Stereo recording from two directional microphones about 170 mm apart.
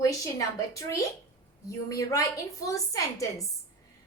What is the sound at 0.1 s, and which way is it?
Speech, 20° left (ahead or behind).